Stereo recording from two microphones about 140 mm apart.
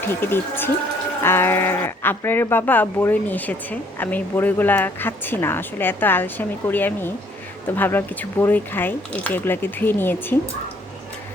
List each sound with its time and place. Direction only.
0.1 s speech: 15° left (ahead or behind)